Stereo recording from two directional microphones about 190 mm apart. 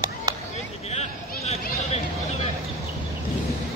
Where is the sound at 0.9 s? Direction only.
35° left (ahead or behind).